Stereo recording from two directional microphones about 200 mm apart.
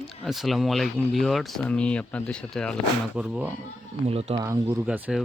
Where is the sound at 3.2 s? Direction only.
5° right (ahead or behind).